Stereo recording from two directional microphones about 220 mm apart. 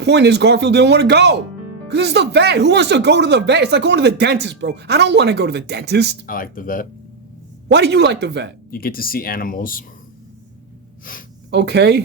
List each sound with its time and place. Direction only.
0.0 s speech: 50° right (ahead or behind)
6.2 s speech: 40° left (ahead or behind)
7.7 s speech: 50° right (ahead or behind)
8.7 s speech: 40° left (ahead or behind)
11.1 s speech: 40° left (ahead or behind)
11.5 s speech: 50° right (ahead or behind)